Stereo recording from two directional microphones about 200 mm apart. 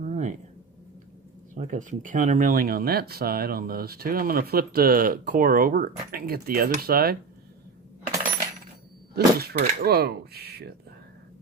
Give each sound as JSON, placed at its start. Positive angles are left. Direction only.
{"t": 0.0, "sound": "a sound", "side_deg": -35}
{"t": 1.5, "sound": "speech", "side_deg": -35}
{"t": 9.1, "sound": "speech", "side_deg": -50}